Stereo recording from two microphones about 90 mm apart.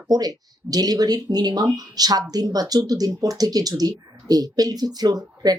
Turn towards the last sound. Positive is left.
turn(degrees=-45)  # may be behind; listen again after turning